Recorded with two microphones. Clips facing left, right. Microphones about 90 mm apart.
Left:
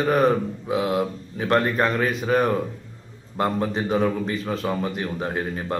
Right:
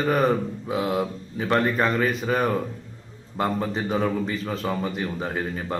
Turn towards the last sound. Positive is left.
turn(degrees=0)  # may be behind; listen again after turning